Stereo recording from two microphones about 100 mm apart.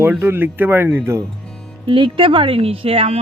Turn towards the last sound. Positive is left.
turn(degrees=-75)  # may be behind; listen again after turning